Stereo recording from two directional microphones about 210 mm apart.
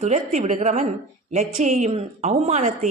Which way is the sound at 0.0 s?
35° right (ahead or behind).